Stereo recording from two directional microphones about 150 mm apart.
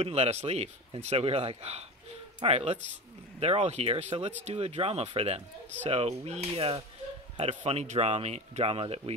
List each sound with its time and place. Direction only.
0.0 s speech: 45° right (ahead or behind)